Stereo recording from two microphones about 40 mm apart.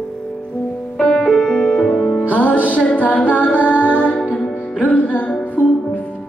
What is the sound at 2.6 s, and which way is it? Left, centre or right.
Music, left.